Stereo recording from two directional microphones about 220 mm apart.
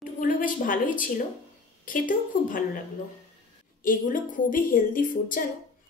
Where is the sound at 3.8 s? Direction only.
40° left (ahead or behind).